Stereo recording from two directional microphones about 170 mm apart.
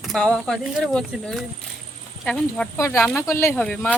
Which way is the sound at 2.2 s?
5° left (ahead or behind).